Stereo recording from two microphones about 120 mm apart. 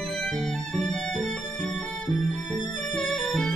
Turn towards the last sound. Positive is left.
turn(degrees=5)  # may be behind; listen again after turning